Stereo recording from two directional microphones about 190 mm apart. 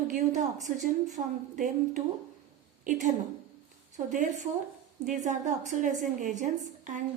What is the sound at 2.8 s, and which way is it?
A woman's voice, 40° right (ahead or behind).